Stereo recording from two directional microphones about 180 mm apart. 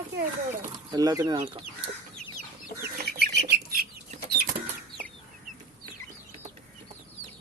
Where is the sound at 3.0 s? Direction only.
60° right (ahead or behind).